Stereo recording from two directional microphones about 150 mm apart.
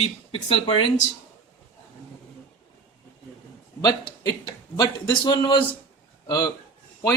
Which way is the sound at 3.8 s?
25° left (ahead or behind).